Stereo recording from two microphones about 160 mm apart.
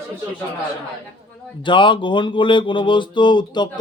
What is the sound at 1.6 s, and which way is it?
Speech, 30° left (ahead or behind).